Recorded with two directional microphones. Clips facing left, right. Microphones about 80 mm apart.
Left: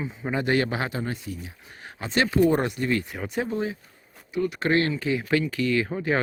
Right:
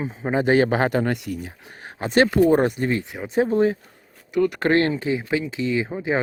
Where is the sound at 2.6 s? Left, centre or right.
Right.